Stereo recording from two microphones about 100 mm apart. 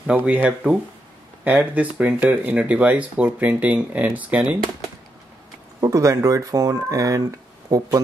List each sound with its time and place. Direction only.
0.0 s speech: 15° right (ahead or behind)
5.8 s speech: 35° right (ahead or behind)